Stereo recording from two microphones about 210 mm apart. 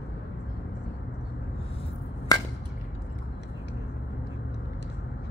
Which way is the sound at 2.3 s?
15° left (ahead or behind).